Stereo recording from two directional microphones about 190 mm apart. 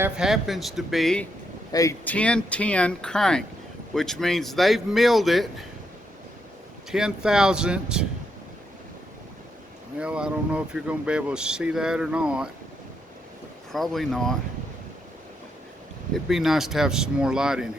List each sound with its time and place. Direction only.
0.0 s speech: centre (ahead or behind)
1.7 s speech: 15° left (ahead or behind); by 5.6 s centre (ahead or behind)
6.9 s speech: 5° right (ahead or behind)
10.0 s speech: 5° right (ahead or behind)
13.7 s speech: centre (ahead or behind)
16.1 s speech: centre (ahead or behind)